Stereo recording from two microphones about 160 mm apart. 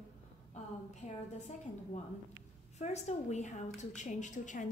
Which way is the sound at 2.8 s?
45° left (ahead or behind).